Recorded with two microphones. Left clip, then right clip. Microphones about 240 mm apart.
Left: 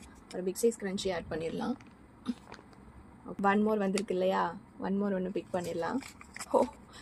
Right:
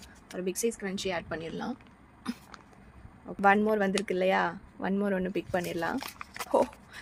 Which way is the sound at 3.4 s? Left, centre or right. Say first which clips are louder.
Right 5 dB; right.